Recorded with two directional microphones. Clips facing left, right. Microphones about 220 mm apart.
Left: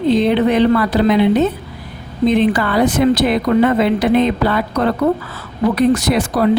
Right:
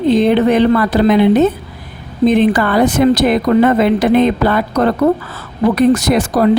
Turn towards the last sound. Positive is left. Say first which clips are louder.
# right 3 dB
turn(degrees=-45)  # may be behind; listen again after turning